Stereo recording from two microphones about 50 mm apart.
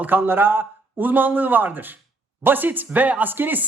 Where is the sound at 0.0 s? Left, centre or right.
Right.